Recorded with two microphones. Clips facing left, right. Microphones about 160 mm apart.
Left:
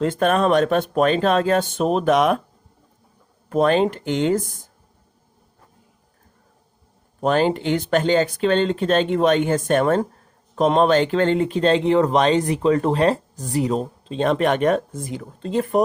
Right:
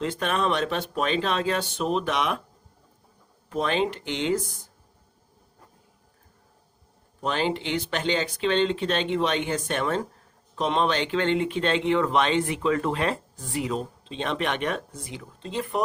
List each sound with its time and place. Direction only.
0.0 s speech: 45° left (ahead or behind)
3.5 s speech: 45° left (ahead or behind)
7.2 s a man's voice: 45° left (ahead or behind)